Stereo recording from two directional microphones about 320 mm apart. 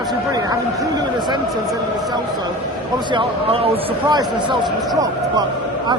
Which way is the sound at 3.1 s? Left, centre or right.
Centre.